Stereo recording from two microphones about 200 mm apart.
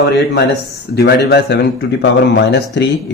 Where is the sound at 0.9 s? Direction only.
55° left (ahead or behind).